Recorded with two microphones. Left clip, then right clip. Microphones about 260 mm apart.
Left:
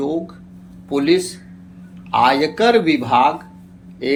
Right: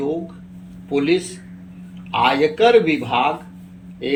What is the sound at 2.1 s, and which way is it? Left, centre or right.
Speech, centre.